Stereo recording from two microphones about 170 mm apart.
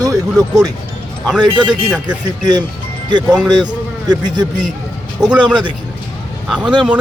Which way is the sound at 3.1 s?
25° right (ahead or behind).